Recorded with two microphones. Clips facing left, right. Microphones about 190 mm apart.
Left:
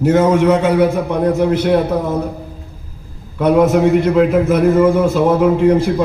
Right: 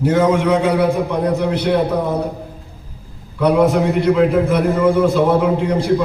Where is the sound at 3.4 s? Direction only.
45° left (ahead or behind).